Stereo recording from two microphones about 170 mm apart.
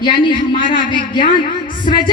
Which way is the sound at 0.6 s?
30° left (ahead or behind).